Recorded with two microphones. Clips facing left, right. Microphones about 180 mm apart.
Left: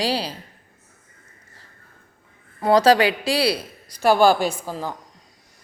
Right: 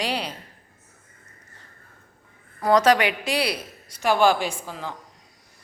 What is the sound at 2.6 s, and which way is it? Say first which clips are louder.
A man's voice: left 3 dB; 30° left (ahead or behind).